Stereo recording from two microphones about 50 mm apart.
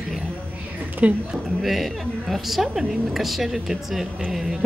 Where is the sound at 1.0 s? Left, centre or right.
Right.